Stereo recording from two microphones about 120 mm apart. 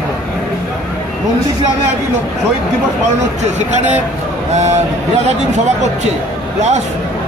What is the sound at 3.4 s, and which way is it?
Speech, 75° right (ahead or behind).